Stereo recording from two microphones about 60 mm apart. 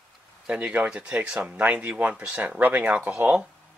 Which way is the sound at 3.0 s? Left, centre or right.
Centre.